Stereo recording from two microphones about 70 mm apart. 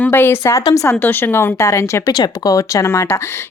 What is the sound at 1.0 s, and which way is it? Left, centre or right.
A woman's voice, left.